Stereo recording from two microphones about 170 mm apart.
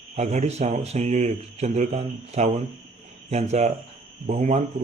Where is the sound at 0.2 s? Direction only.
40° right (ahead or behind).